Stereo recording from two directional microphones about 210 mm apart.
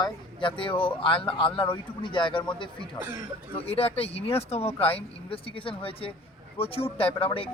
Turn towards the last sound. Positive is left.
turn(degrees=25)  # may be behind; listen again after turning